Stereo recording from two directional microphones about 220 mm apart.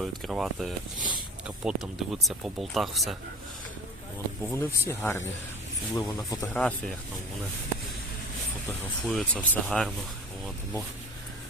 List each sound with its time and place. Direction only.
0.0 s speech: centre (ahead or behind)
4.5 s speech: 10° left (ahead or behind)
8.8 s speech: centre (ahead or behind)